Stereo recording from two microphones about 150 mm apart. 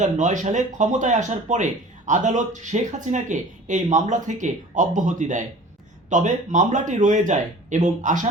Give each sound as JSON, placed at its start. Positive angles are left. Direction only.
{"t": 0.0, "sound": "speech", "side_deg": -55}